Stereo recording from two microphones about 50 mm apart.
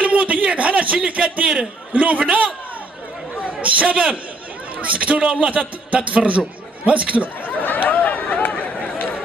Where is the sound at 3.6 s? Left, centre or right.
Right.